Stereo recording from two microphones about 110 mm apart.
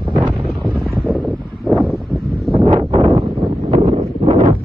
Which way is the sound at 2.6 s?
60° right (ahead or behind).